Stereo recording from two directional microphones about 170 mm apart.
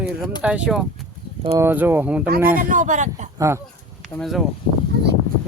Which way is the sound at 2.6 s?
50° right (ahead or behind).